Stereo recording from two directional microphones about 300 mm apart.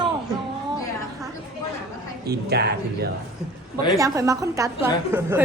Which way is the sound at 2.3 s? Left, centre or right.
Right.